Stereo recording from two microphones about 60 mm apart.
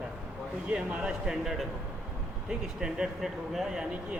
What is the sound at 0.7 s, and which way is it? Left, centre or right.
Speech, centre.